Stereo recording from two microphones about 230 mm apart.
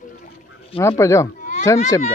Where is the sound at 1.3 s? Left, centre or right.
Left.